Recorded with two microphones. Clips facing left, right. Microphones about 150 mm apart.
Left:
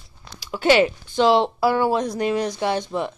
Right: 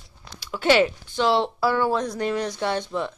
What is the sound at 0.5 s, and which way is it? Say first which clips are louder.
Speech: left 2 dB; 5° left (ahead or behind).